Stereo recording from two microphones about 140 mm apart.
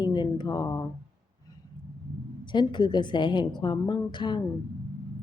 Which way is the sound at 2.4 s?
35° left (ahead or behind).